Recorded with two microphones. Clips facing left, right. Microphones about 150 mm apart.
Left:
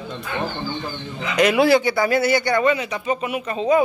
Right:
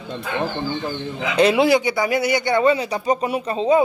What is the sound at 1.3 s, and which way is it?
A man's voice, 30° right (ahead or behind).